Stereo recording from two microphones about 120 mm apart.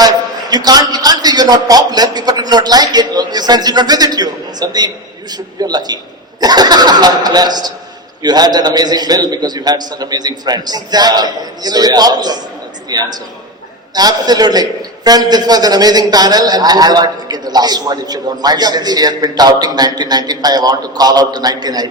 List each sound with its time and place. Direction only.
0.5 s a man's voice: 35° right (ahead or behind)